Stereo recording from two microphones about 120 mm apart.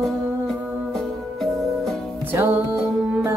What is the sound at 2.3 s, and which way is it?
Music, 15° right (ahead or behind).